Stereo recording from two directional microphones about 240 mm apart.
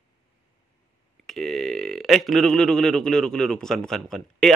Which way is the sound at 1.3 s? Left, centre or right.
Centre.